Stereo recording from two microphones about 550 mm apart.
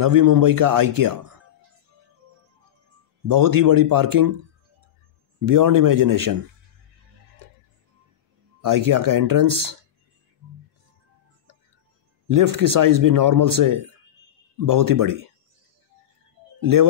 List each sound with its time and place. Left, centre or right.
0.0 s speech: right
3.3 s speech: right
5.4 s speech: right
8.5 s speech: right
12.3 s speech: right
16.5 s music: right